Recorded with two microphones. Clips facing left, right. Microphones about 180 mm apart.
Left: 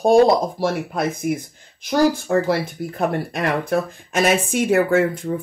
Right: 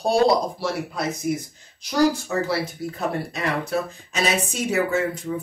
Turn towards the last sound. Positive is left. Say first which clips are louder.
# left 6 dB
turn(degrees=50)  # may be behind; listen again after turning